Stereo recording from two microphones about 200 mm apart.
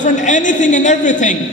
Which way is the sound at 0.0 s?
40° left (ahead or behind).